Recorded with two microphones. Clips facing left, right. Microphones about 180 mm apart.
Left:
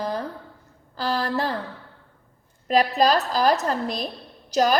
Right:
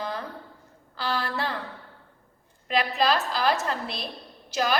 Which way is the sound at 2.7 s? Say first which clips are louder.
Left 5 dB; 40° left (ahead or behind).